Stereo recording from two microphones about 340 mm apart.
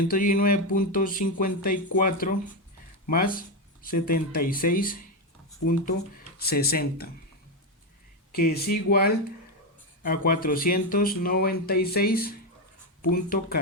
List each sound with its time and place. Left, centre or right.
0.1 s speech: left
8.3 s speech: left